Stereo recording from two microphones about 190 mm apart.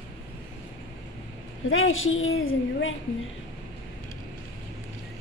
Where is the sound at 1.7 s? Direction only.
90° left.